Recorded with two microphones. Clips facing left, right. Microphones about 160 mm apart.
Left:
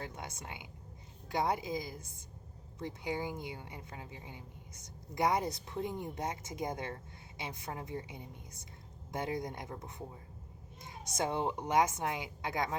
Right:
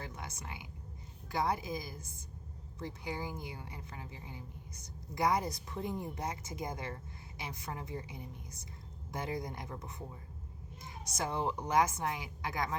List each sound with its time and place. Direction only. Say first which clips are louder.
0.2 s a woman's voice: left 1 dB; 20° left (ahead or behind)